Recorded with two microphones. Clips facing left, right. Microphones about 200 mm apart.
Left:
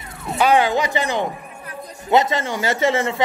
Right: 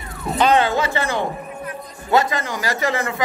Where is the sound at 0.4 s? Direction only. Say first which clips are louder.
Even; 10° left (ahead or behind).